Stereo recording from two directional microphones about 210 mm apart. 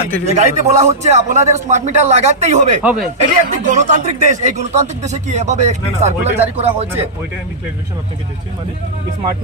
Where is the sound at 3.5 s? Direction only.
35° right (ahead or behind).